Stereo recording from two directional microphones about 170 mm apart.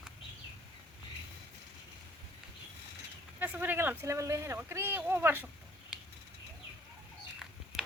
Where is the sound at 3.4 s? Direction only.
10° right (ahead or behind).